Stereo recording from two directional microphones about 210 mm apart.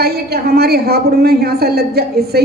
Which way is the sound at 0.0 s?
50° right (ahead or behind).